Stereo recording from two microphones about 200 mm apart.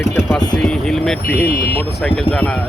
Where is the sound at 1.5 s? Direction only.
50° left (ahead or behind).